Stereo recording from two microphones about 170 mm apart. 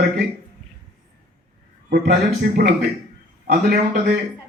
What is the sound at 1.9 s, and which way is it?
Speech, 70° right (ahead or behind).